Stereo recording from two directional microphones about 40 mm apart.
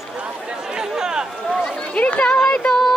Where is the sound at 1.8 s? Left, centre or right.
Left.